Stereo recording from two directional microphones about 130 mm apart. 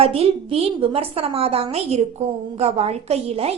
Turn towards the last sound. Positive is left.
turn(degrees=-50)  # may be behind; listen again after turning